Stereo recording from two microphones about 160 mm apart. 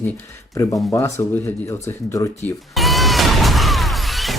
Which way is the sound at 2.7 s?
Centre (ahead or behind).